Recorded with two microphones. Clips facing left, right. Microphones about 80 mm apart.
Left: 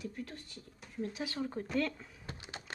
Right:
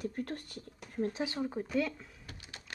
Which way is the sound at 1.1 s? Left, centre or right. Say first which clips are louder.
Right 4 dB; right.